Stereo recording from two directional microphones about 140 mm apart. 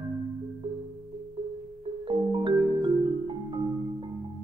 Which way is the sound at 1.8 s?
40° right (ahead or behind).